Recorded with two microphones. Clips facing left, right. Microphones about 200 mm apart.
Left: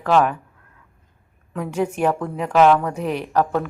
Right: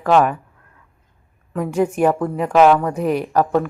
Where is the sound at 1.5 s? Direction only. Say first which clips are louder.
Right 4 dB; 10° right (ahead or behind).